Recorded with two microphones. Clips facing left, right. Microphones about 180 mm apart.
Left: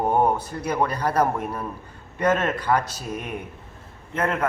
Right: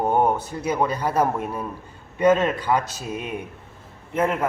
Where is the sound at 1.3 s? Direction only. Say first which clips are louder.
Right 1 dB; 20° right (ahead or behind).